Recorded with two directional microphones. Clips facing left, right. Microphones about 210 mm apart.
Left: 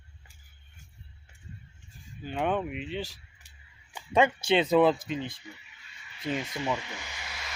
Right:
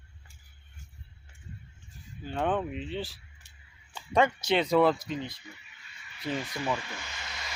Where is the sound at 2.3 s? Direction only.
10° left (ahead or behind).